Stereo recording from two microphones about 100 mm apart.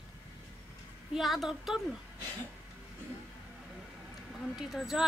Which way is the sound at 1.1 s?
Centre (ahead or behind).